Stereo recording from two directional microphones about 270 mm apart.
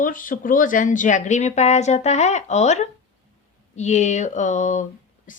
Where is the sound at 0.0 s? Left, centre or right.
Left.